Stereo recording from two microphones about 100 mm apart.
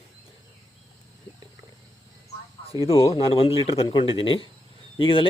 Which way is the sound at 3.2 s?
75° left (ahead or behind).